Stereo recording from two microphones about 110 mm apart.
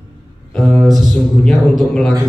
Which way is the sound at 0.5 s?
5° left (ahead or behind).